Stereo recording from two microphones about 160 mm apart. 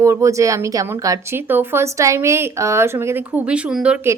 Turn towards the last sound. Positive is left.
turn(degrees=-5)  # may be behind; listen again after turning